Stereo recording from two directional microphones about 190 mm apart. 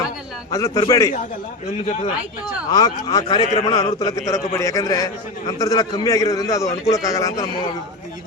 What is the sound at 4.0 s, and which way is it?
A man's voice, 20° left (ahead or behind).